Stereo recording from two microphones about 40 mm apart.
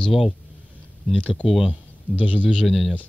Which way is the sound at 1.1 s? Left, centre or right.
Left.